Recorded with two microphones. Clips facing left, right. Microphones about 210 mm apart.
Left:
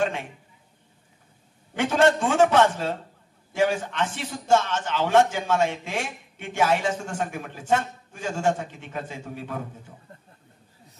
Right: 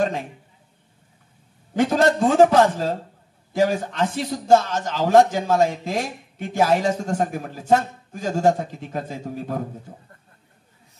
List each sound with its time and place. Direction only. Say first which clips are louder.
0.0 s a man's voice: right 3 dB; 40° right (ahead or behind)
1.8 s a man's voice: right 2 dB; 40° right (ahead or behind)